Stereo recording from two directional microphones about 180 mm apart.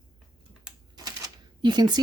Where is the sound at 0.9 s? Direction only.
20° right (ahead or behind).